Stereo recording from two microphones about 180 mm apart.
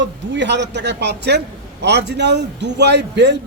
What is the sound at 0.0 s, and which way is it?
A man's voice, 75° right (ahead or behind).